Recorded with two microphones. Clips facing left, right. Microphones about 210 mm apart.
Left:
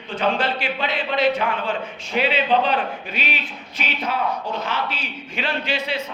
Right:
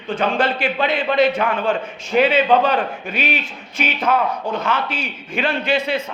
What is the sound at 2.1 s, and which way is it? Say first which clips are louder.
Speech: right 5 dB; 50° right (ahead or behind).